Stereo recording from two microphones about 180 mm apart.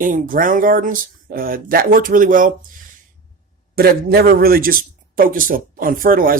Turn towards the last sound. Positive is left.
turn(degrees=-50)  # may be behind; listen again after turning